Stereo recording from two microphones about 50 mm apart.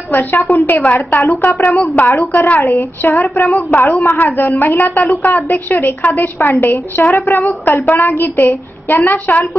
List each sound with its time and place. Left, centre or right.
0.1 s a woman's voice: left
2.6 s a woman's voice: left